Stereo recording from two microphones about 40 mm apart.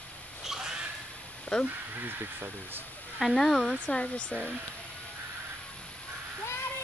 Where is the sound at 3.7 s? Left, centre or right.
Left.